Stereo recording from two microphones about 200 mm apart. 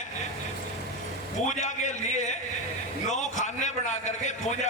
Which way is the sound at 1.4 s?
35° left (ahead or behind).